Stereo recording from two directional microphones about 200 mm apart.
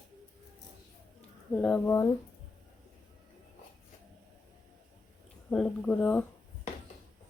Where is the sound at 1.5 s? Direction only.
5° left (ahead or behind).